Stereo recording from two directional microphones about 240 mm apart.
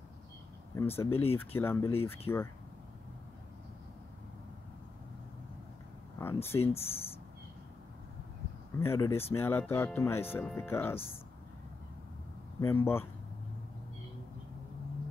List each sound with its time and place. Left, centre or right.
0.7 s speech: centre
1.1 s speech: left
1.4 s speech: centre
6.1 s speech: centre
6.5 s speech: left
8.7 s speech: centre
12.5 s speech: centre